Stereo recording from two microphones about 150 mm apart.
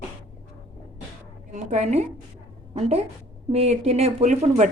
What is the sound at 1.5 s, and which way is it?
A woman's voice, 50° right (ahead or behind).